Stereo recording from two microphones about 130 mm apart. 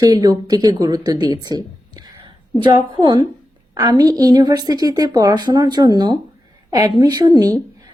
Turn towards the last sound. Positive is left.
turn(degrees=-30)  # may be behind; listen again after turning